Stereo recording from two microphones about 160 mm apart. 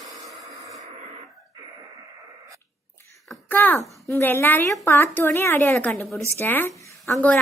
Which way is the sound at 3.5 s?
10° left (ahead or behind).